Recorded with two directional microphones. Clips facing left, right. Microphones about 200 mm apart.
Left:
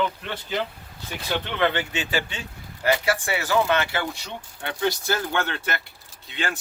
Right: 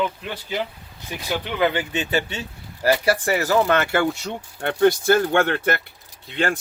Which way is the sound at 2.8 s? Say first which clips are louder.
Right 4 dB; 35° right (ahead or behind).